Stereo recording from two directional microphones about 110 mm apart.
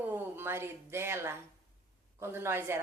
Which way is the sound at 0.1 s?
20° right (ahead or behind).